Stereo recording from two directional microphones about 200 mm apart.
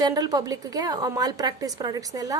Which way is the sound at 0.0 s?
20° right (ahead or behind).